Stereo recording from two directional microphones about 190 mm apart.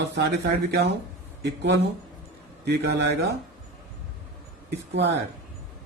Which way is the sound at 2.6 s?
60° right (ahead or behind).